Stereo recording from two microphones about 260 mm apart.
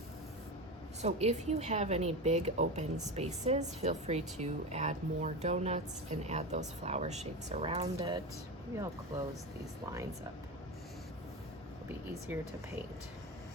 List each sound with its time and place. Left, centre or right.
1.0 s a woman's voice: right
12.3 s speech: centre